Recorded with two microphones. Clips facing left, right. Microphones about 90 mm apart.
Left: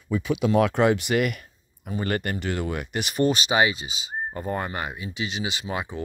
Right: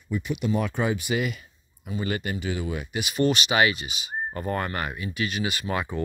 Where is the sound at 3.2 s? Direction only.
35° left (ahead or behind).